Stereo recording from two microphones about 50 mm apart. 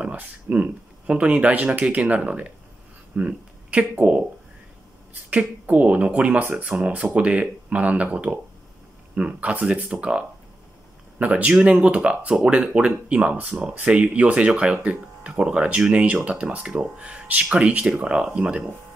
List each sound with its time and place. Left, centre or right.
0.0 s speech: right
3.2 s a sound: right
4.0 s speech: right
5.3 s speech: right